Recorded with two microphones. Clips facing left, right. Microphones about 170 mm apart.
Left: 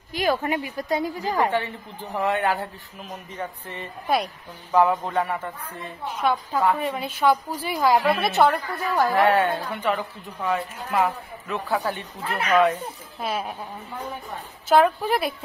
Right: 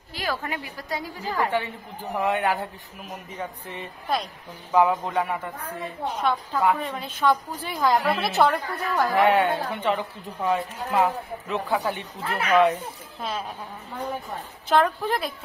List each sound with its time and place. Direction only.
0.1 s a woman's voice: 20° left (ahead or behind)
1.5 s a woman's voice: 10° right (ahead or behind)
6.2 s a woman's voice: centre (ahead or behind)
9.1 s a woman's voice: 20° right (ahead or behind)
12.2 s a woman's voice: centre (ahead or behind)
14.7 s a woman's voice: 10° left (ahead or behind)